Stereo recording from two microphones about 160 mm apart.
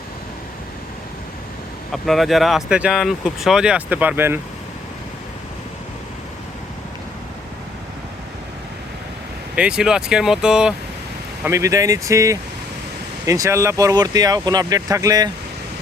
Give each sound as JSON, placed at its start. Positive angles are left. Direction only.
{"t": 1.9, "sound": "speech", "side_deg": 0}
{"t": 9.6, "sound": "speech", "side_deg": -5}
{"t": 11.4, "sound": "speech", "side_deg": -20}